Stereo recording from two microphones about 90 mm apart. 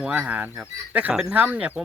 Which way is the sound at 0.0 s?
15° right (ahead or behind).